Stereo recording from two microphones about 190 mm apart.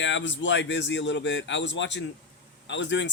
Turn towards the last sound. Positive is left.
turn(degrees=70)  # may be behind; listen again after turning